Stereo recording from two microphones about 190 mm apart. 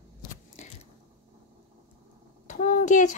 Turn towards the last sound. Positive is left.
turn(degrees=40)  # may be behind; listen again after turning